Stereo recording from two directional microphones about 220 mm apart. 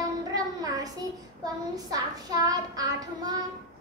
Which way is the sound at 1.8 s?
15° right (ahead or behind).